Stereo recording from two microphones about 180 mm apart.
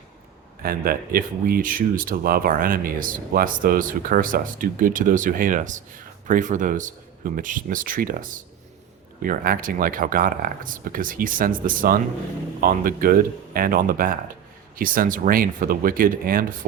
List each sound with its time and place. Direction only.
0.6 s speech: 55° right (ahead or behind)